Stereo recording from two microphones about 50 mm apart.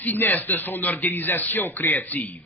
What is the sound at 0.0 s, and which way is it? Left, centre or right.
A man's voice, left.